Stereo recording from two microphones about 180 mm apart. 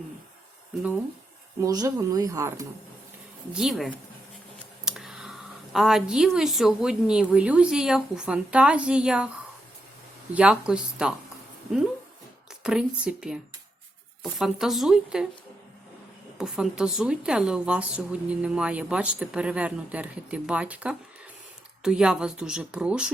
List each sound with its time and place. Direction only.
1.6 s a woman's voice: 20° right (ahead or behind)
3.5 s speech: centre (ahead or behind)
10.3 s speech: 5° right (ahead or behind)
12.6 s speech: 5° right (ahead or behind)
16.4 s a woman's voice: 5° right (ahead or behind)